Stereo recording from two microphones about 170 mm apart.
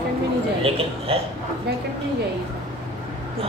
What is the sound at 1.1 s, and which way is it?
Speech, 35° right (ahead or behind).